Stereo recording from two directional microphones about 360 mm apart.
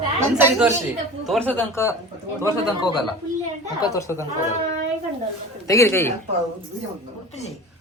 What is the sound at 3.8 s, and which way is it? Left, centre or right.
Speech, centre.